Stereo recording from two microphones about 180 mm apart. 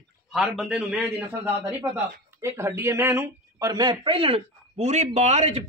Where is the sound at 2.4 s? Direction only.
15° right (ahead or behind).